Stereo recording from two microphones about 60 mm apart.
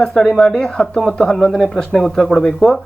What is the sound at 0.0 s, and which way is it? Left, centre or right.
Speech, centre.